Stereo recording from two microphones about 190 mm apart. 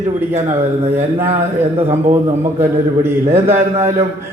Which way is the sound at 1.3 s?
35° right (ahead or behind).